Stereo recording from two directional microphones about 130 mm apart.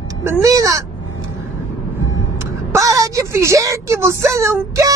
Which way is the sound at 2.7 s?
25° right (ahead or behind).